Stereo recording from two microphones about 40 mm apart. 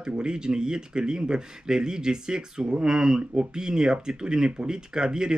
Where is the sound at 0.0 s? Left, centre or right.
Right.